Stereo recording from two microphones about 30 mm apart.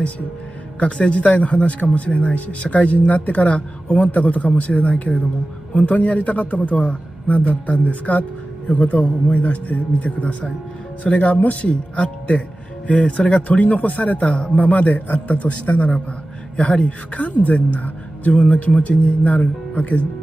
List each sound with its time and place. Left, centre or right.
0.7 s a man's voice: left
6.8 s speech: left
14.7 s speech: left
16.5 s speech: left
17.5 s speech: left